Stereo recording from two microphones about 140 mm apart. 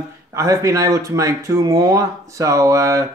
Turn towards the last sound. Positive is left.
turn(degrees=-20)  # may be behind; listen again after turning